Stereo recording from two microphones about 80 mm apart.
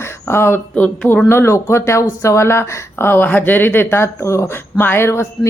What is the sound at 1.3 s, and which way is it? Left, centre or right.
Speech, left.